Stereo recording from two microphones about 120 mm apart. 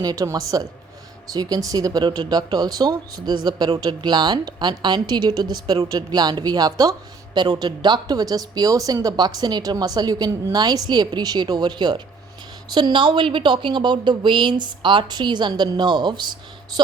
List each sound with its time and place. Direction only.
0.0 s speech: 30° right (ahead or behind)